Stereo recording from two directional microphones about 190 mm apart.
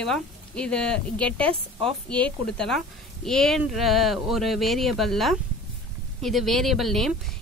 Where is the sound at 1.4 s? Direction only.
30° right (ahead or behind).